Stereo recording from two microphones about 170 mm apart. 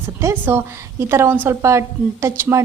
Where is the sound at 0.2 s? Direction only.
15° right (ahead or behind).